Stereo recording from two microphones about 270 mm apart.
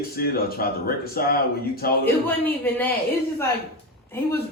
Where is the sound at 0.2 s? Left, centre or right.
Left.